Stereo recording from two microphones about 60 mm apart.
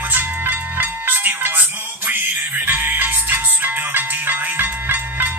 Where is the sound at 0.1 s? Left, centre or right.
Right.